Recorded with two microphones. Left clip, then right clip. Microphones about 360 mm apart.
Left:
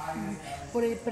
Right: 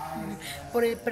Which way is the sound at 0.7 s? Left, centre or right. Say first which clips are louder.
Right 3 dB; right.